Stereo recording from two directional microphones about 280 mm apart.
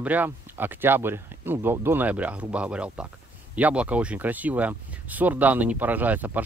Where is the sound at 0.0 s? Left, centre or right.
Centre.